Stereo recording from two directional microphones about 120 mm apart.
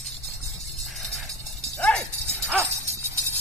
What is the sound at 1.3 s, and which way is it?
Dog, 30° right (ahead or behind).